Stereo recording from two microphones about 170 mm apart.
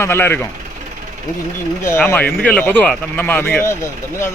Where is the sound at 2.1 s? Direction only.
10° left (ahead or behind).